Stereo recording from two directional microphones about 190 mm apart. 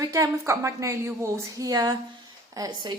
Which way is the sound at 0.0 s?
15° right (ahead or behind).